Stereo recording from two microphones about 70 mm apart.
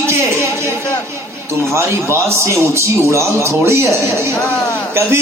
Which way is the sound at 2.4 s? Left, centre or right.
Right.